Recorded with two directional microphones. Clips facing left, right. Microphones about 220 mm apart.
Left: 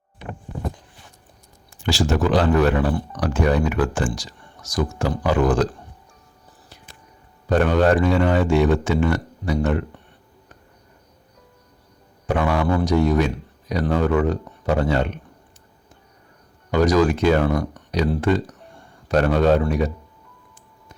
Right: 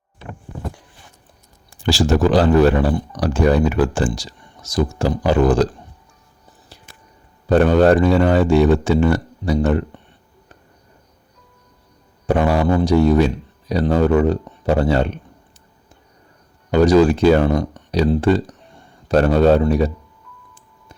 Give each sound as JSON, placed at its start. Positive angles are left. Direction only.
{"t": 1.8, "sound": "speech", "side_deg": -35}
{"t": 7.4, "sound": "speech", "side_deg": -35}
{"t": 12.2, "sound": "speech", "side_deg": -35}
{"t": 16.7, "sound": "speech", "side_deg": -30}